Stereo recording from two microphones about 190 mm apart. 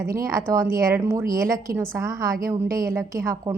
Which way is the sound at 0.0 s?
15° right (ahead or behind).